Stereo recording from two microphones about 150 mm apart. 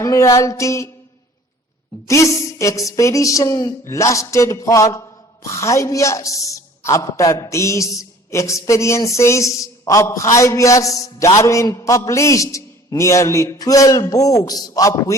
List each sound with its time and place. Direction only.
0.0 s music: 20° left (ahead or behind)
2.0 s music: 20° left (ahead or behind)